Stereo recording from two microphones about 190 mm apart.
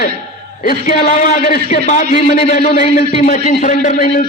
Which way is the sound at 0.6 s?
45° left (ahead or behind).